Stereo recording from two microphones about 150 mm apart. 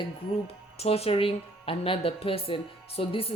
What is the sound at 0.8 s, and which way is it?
Speech, 40° left (ahead or behind).